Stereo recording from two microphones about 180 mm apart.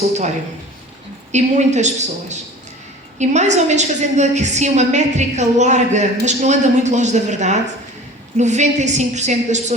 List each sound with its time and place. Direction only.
1.3 s a woman's voice: 40° right (ahead or behind)